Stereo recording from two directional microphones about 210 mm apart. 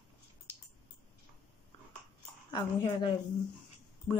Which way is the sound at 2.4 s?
20° left (ahead or behind).